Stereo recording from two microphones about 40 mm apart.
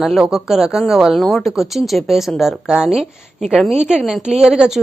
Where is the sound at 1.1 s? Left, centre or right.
Centre.